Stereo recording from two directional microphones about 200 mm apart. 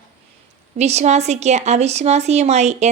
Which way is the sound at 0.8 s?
35° right (ahead or behind).